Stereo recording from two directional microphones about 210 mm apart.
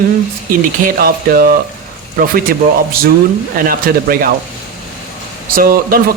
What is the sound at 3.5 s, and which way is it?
Speech, 45° right (ahead or behind).